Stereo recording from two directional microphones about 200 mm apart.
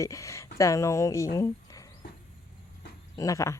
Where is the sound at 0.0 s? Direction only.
15° left (ahead or behind).